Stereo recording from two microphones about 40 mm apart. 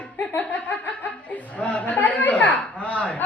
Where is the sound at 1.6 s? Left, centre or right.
Left.